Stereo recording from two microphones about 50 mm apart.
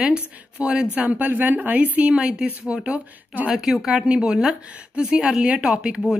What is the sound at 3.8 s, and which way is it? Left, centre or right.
A woman's voice, centre.